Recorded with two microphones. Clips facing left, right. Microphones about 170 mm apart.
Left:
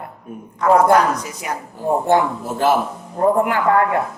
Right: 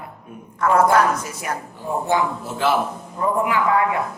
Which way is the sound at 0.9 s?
15° left (ahead or behind).